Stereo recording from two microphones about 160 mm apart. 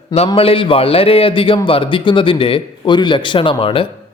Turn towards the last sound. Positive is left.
turn(degrees=35)  # may be behind; listen again after turning